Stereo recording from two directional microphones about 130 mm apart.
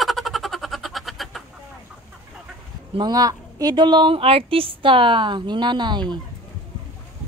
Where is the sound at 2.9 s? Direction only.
35° right (ahead or behind).